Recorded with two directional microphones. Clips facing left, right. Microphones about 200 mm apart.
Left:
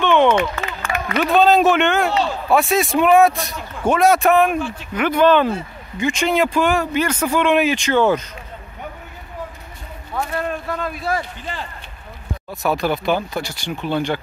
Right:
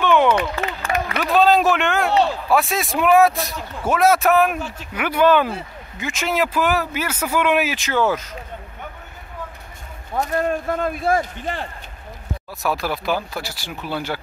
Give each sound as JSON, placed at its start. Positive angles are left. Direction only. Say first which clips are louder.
{"t": 0.0, "sound": "a sound", "louder": "left 2 dB", "side_deg": -5}
{"t": 0.7, "sound": "a sound", "louder": "right 2 dB", "side_deg": -35}
{"t": 1.1, "sound": "a man's voice", "louder": "left 2 dB", "side_deg": 0}
{"t": 4.6, "sound": "speech", "louder": "left 5 dB", "side_deg": -40}
{"t": 4.9, "sound": "a man's voice", "louder": "left 2 dB", "side_deg": -10}
{"t": 10.1, "sound": "speech", "louder": "right 3 dB", "side_deg": -40}
{"t": 12.6, "sound": "a man's voice", "louder": "left 4 dB", "side_deg": 0}